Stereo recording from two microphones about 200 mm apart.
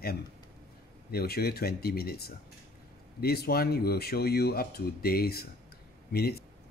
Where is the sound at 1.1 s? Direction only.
50° left (ahead or behind).